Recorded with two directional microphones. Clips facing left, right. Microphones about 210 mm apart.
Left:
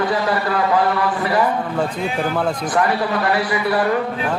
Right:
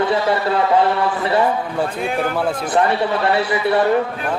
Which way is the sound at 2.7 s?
25° right (ahead or behind).